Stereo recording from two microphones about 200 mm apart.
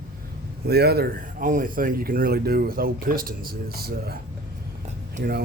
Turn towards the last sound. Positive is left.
turn(degrees=-50)  # may be behind; listen again after turning